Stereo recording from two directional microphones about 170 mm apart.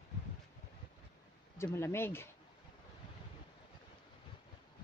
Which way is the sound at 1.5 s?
15° left (ahead or behind).